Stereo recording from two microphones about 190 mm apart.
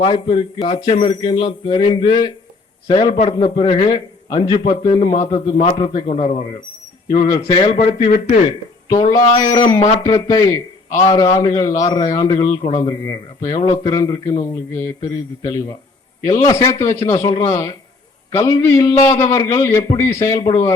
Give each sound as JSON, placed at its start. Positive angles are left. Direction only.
{"t": 0.0, "sound": "a man's voice", "side_deg": 25}
{"t": 8.4, "sound": "a man's voice", "side_deg": 20}
{"t": 16.2, "sound": "a man's voice", "side_deg": 20}